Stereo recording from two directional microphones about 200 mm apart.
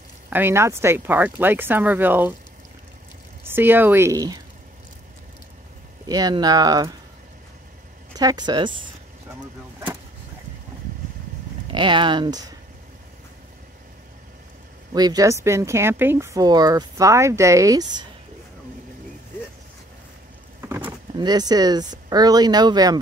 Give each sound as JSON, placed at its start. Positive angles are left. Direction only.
{"t": 0.3, "sound": "speech", "side_deg": -10}
{"t": 3.4, "sound": "speech", "side_deg": -10}
{"t": 6.0, "sound": "speech", "side_deg": -20}
{"t": 8.2, "sound": "speech", "side_deg": -20}
{"t": 11.6, "sound": "speech", "side_deg": -25}
{"t": 14.9, "sound": "speech", "side_deg": -20}
{"t": 20.8, "sound": "speech", "side_deg": -20}